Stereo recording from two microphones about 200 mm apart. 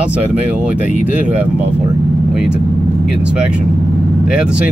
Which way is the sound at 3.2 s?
5° right (ahead or behind).